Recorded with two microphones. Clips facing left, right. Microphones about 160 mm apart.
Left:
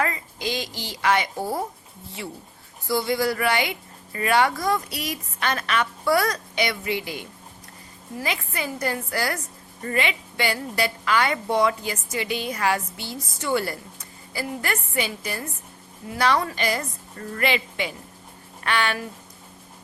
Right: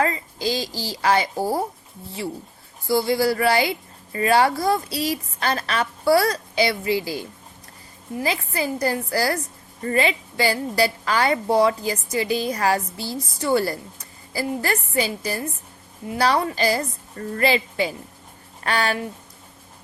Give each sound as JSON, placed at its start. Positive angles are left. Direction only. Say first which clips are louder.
{"t": 0.0, "sound": "a woman's voice", "louder": "right 4 dB", "side_deg": -30}